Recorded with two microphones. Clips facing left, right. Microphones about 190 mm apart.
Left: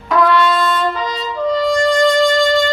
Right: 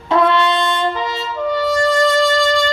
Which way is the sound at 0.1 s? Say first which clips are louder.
Left 1 dB; 25° right (ahead or behind).